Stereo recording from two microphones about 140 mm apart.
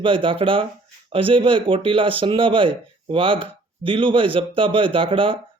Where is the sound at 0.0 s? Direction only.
40° right (ahead or behind).